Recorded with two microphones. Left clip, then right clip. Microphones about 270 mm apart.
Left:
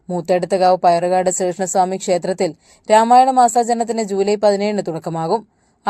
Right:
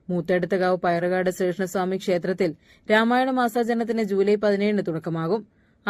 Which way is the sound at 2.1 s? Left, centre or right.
Left.